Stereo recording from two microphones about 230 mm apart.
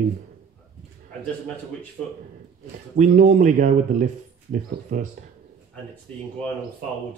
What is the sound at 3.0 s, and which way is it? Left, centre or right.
Speech, right.